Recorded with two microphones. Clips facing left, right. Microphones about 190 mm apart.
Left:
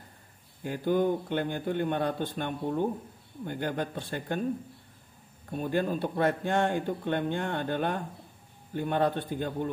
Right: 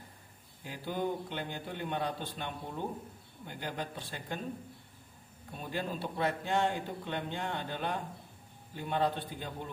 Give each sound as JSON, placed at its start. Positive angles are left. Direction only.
{"t": 0.7, "sound": "speech", "side_deg": 50}
{"t": 5.5, "sound": "speech", "side_deg": 50}